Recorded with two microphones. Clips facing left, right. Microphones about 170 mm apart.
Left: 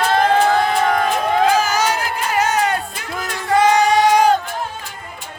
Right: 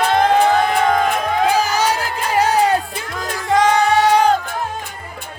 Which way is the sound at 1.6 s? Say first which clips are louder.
Right 1 dB; 30° right (ahead or behind).